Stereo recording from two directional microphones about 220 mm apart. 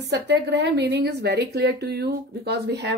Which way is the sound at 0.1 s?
50° right (ahead or behind).